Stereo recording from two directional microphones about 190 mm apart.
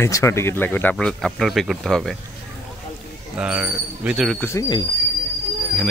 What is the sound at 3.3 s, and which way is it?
Speech, 5° right (ahead or behind).